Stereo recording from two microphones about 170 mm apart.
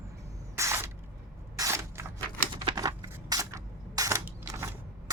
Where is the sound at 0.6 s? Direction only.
15° right (ahead or behind).